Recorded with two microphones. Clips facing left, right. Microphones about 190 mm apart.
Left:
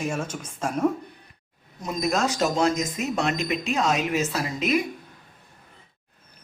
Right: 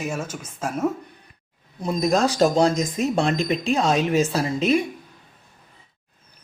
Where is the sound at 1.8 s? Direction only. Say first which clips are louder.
Right 4 dB; 30° right (ahead or behind).